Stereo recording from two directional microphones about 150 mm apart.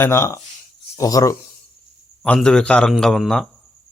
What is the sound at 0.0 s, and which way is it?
Speech, 20° left (ahead or behind).